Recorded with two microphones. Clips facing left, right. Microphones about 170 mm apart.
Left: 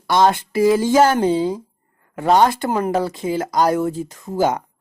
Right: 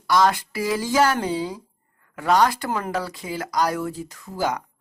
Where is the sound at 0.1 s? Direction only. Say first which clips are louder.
Left 4 dB; 25° left (ahead or behind).